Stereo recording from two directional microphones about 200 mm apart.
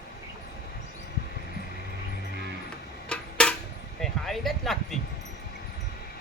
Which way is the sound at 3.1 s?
5° left (ahead or behind).